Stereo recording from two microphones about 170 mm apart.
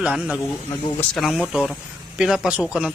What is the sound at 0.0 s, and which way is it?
Speech, 5° right (ahead or behind).